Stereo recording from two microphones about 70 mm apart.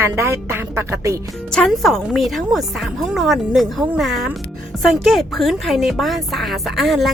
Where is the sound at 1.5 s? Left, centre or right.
Centre.